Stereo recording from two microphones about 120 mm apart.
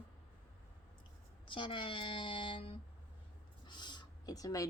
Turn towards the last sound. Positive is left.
turn(degrees=30)  # may be behind; listen again after turning